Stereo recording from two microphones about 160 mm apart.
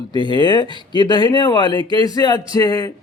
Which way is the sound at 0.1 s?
30° left (ahead or behind).